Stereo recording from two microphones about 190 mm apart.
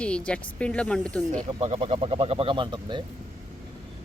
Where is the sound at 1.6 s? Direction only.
35° right (ahead or behind).